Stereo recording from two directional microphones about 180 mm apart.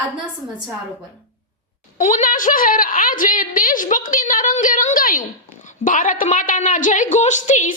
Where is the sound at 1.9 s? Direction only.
45° left (ahead or behind).